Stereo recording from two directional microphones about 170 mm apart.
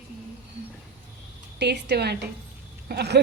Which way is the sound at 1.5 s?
80° right.